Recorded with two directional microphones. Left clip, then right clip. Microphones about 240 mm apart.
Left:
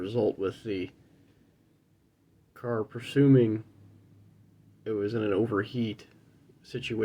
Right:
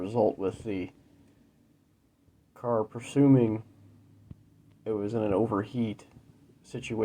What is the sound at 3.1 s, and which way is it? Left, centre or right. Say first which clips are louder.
Speech: left 1 dB; right.